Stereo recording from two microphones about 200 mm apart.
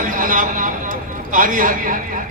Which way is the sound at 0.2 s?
45° right (ahead or behind).